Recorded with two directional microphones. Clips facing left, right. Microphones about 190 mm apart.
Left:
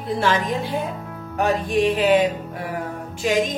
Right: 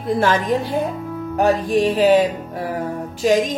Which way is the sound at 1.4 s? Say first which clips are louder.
Right 3 dB; 40° right (ahead or behind).